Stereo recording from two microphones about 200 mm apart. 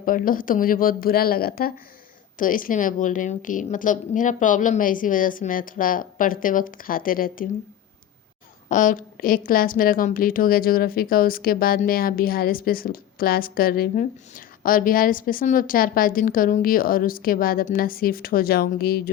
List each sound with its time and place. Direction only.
0.0 s a woman's voice: 45° left (ahead or behind)
8.7 s a woman's voice: 40° left (ahead or behind)